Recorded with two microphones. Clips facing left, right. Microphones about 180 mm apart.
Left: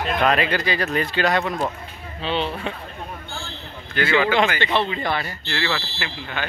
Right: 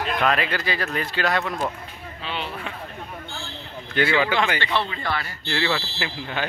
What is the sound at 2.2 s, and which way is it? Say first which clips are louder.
Speech: left 7 dB; 25° left (ahead or behind).